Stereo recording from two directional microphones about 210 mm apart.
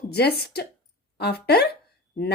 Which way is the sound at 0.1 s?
50° left (ahead or behind).